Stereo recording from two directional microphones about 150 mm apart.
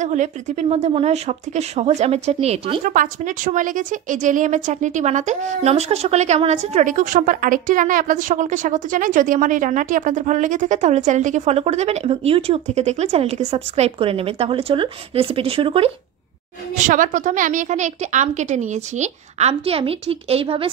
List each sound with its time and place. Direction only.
0.0 s a woman's voice: 50° right (ahead or behind)
2.8 s a woman's voice: 60° right (ahead or behind); by 15.9 s 40° right (ahead or behind)
16.7 s a woman's voice: 60° right (ahead or behind); by 20.7 s 40° right (ahead or behind)